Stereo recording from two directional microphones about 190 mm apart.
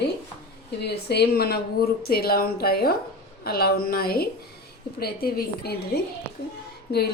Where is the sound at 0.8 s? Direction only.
60° left (ahead or behind).